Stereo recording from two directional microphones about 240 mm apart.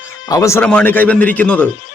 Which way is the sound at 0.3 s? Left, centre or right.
Centre.